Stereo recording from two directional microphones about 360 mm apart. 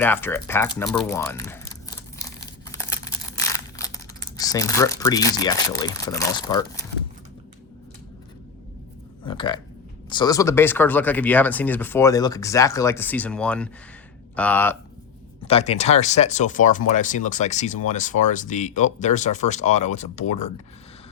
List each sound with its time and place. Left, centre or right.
0.0 s a sound: centre
9.2 s burping: centre
10.1 s speech: centre
15.4 s speech: centre